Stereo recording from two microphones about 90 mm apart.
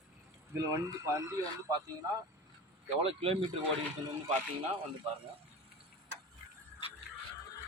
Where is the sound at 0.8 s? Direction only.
40° right (ahead or behind).